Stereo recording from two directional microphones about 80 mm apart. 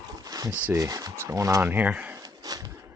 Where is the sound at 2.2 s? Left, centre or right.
Right.